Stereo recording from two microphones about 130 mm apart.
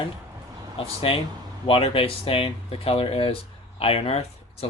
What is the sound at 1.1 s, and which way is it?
Speech, 45° left (ahead or behind).